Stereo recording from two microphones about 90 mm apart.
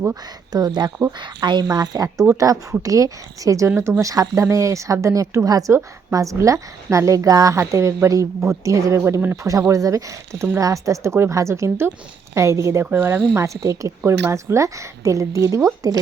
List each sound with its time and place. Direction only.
0.5 s a woman's voice: 50° right (ahead or behind)
3.7 s a woman's voice: 25° right (ahead or behind)
12.8 s a woman's voice: 20° right (ahead or behind); by 16.0 s 40° right (ahead or behind)